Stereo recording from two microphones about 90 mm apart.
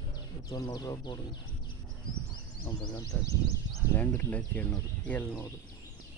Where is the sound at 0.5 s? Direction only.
45° left (ahead or behind).